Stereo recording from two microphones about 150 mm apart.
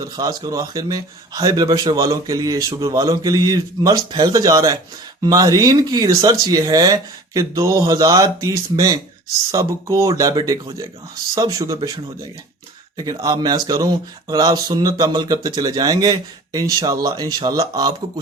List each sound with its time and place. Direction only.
0.0 s speech: 25° right (ahead or behind)
13.0 s speech: 25° right (ahead or behind)